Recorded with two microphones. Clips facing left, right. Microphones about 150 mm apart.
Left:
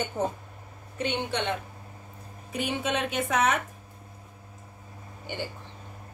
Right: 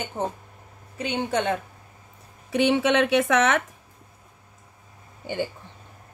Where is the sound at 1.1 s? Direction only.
45° right (ahead or behind).